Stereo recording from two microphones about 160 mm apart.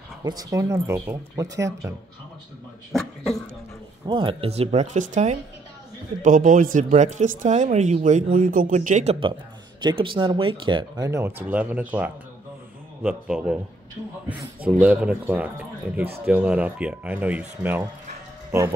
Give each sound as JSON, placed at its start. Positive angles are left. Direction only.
{"t": 0.2, "sound": "speech", "side_deg": -20}
{"t": 2.9, "sound": "speech", "side_deg": 0}
{"t": 4.1, "sound": "speech", "side_deg": -35}
{"t": 9.8, "sound": "speech", "side_deg": -30}
{"t": 11.1, "sound": "speech", "side_deg": -15}
{"t": 14.6, "sound": "speech", "side_deg": -5}